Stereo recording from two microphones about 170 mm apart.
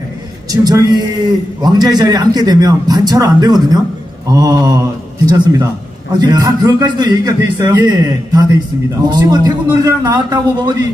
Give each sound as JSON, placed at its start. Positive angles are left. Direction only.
{"t": 0.5, "sound": "a man's voice", "side_deg": -20}